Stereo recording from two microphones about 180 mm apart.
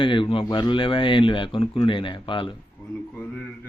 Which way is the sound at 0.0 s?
30° left (ahead or behind).